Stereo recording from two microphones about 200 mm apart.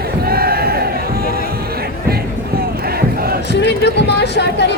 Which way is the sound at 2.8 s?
50° right (ahead or behind).